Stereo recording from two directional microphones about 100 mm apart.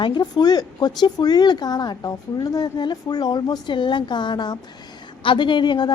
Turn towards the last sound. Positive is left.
turn(degrees=55)  # may be behind; listen again after turning